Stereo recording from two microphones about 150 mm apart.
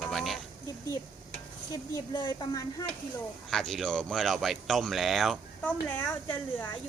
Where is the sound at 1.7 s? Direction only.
25° left (ahead or behind).